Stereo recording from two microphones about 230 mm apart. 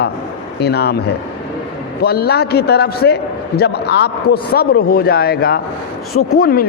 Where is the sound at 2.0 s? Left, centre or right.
Left.